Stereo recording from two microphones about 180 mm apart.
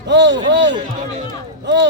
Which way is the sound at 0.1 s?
80° right.